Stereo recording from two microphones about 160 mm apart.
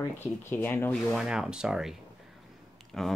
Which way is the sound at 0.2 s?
15° left (ahead or behind).